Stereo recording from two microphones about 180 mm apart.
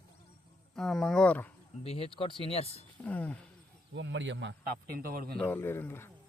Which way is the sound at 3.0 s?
10° left (ahead or behind).